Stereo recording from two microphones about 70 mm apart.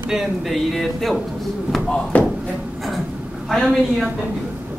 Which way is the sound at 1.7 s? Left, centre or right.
Centre.